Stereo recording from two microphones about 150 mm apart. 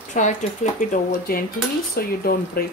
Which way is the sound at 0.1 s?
55° left (ahead or behind).